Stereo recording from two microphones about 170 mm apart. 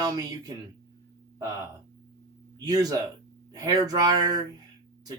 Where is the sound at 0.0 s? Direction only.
20° right (ahead or behind).